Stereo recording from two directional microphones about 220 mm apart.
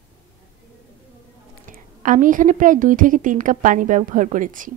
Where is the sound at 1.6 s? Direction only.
35° right (ahead or behind).